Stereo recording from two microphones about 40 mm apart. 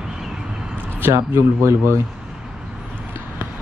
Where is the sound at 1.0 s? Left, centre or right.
Right.